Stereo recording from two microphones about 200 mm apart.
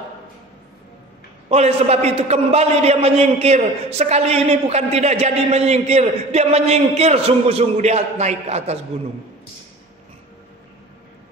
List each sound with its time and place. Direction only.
1.5 s a man's voice: 35° right (ahead or behind)